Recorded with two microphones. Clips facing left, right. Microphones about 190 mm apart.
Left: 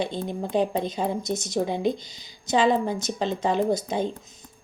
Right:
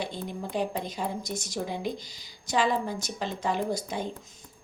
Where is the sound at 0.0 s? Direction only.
25° left (ahead or behind).